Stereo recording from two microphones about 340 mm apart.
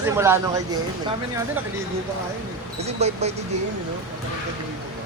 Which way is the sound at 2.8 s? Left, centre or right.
Centre.